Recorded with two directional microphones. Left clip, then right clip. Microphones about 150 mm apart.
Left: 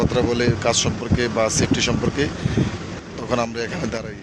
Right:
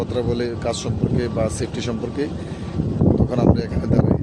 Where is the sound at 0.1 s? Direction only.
Centre (ahead or behind).